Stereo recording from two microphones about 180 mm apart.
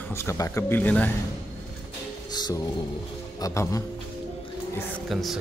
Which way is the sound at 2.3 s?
25° left (ahead or behind).